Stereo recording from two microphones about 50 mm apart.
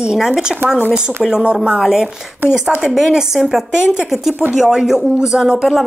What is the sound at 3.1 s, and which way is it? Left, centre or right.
A woman's voice, centre.